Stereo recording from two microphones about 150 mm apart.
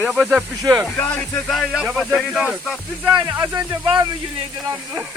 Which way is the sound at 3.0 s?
25° right (ahead or behind).